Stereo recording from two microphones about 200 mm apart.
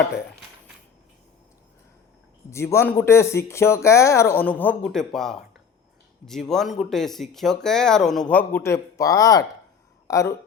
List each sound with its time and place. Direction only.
2.5 s speech: 15° left (ahead or behind)